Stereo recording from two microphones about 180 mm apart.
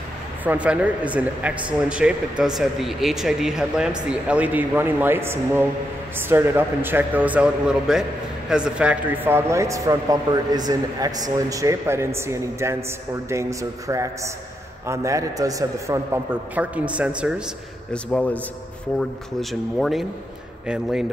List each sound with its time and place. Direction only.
0.4 s speech: 10° right (ahead or behind)
17.9 s a man's voice: 5° left (ahead or behind)
19.8 s speech: centre (ahead or behind)